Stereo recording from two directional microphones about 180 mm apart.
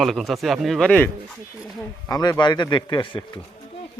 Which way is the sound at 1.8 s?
20° left (ahead or behind).